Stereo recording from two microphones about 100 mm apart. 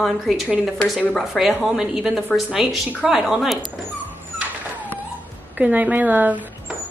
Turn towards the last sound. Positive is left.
turn(degrees=-15)  # may be behind; listen again after turning